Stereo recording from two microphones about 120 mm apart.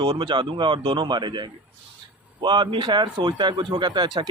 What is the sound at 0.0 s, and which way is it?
Speech, 40° right (ahead or behind).